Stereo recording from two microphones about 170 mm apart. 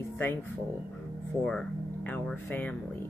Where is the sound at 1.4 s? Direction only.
5° left (ahead or behind).